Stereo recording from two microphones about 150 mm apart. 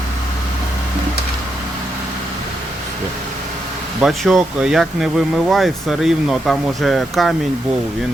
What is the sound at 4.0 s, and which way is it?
Speech, centre (ahead or behind).